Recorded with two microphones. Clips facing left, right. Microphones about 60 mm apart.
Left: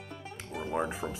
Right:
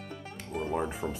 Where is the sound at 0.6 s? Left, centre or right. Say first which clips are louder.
Right 1 dB; centre.